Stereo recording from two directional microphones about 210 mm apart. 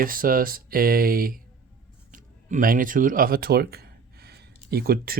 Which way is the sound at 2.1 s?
40° right (ahead or behind).